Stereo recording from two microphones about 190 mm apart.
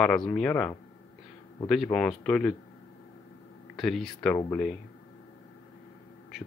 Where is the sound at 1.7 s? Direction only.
Centre (ahead or behind).